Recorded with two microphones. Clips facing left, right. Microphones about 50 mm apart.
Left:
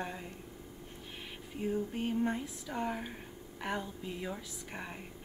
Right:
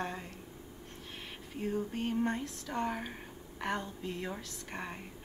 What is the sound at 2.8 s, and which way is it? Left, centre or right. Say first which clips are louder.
Speech: right 1 dB; centre.